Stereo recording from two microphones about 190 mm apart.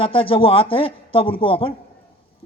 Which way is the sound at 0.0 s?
30° left (ahead or behind).